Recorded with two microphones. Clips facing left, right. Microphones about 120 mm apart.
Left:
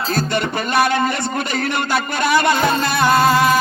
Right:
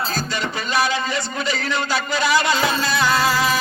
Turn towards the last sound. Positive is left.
turn(degrees=55)  # may be behind; listen again after turning